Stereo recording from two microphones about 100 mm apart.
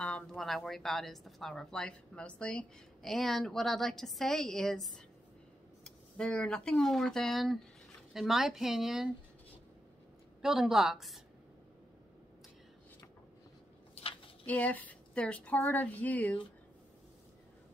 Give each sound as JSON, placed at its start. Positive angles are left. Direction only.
{"t": 0.0, "sound": "a woman's voice", "side_deg": 10}
{"t": 10.4, "sound": "a woman's voice", "side_deg": -5}
{"t": 13.9, "sound": "a sound", "side_deg": 65}
{"t": 14.4, "sound": "speech", "side_deg": 15}